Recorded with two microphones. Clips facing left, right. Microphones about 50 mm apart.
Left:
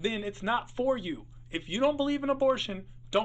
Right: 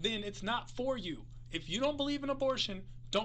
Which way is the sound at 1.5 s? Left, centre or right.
Left.